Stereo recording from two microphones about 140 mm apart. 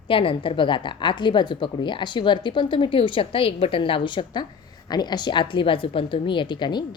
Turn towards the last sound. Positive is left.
turn(degrees=35)  # may be behind; listen again after turning